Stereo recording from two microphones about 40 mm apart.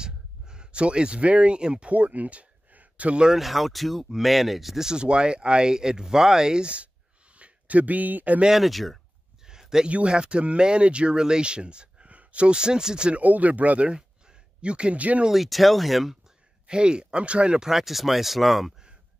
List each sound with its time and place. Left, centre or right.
0.0 s a sound: right
1.9 s a sound: right
3.3 s speech: centre
4.8 s speech: right
7.3 s speech: right
8.5 s speech: centre
9.4 s a sound: centre
9.8 s speech: right
13.2 s speech: right
13.8 s a sound: right
15.3 s speech: centre
16.6 s speech: right
17.6 s speech: centre